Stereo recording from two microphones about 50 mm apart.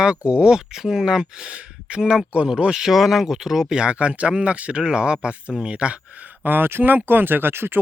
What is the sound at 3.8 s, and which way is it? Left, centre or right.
Speech, right.